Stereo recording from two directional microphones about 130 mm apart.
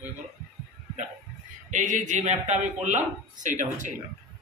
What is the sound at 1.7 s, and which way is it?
A man's voice, 75° right (ahead or behind).